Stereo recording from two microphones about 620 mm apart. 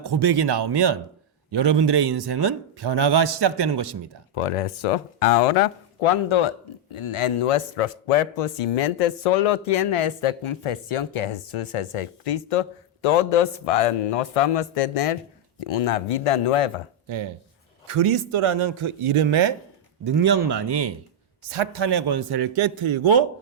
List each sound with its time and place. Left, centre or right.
0.0 s a man's voice: right
4.4 s speech: left
6.2 s a man's voice: left
17.8 s a man's voice: right